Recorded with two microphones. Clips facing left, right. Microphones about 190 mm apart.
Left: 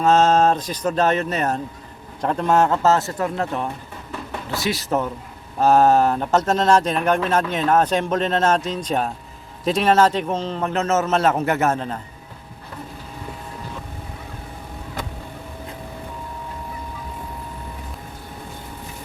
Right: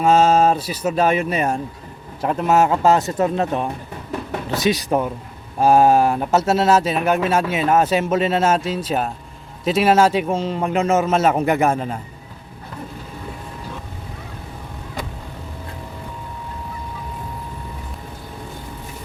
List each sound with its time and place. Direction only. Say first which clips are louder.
0.0 s speech: right 1 dB; 10° right (ahead or behind)